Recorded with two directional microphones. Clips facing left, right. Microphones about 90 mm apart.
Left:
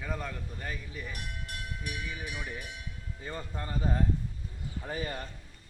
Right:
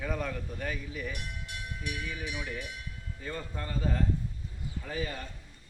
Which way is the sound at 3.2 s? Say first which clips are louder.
Right 1 dB; 20° left (ahead or behind).